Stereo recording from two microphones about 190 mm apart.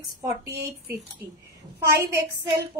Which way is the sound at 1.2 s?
15° right (ahead or behind).